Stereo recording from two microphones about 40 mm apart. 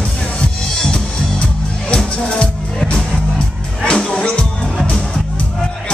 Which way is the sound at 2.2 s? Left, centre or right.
Left.